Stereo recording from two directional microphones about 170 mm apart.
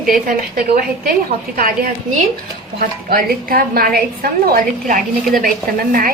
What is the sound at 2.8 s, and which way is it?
A woman's voice, 60° right (ahead or behind).